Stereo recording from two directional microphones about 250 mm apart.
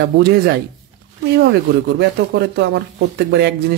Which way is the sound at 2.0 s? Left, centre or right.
Right.